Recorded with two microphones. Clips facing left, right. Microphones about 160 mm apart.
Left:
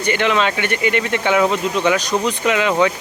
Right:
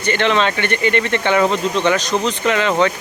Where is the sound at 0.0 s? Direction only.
10° left (ahead or behind).